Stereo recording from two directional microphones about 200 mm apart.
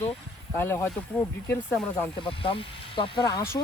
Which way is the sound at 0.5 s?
10° left (ahead or behind).